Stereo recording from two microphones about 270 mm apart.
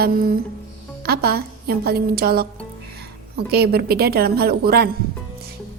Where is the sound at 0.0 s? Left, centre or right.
Right.